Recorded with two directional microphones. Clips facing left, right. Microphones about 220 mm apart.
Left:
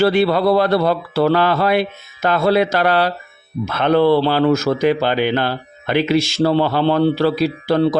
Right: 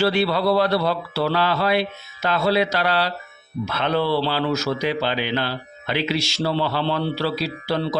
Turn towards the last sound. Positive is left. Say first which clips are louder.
# left 8 dB
turn(degrees=50)  # may be behind; listen again after turning